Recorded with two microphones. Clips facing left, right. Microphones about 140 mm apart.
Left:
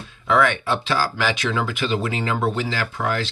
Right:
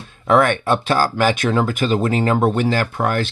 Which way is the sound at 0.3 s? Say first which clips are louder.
Right 4 dB; 50° right (ahead or behind).